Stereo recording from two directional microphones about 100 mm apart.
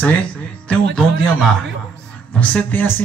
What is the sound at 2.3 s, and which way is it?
Speech, 15° left (ahead or behind).